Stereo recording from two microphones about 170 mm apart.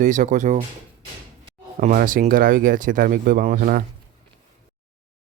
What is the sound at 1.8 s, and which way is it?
Speech, 55° right (ahead or behind).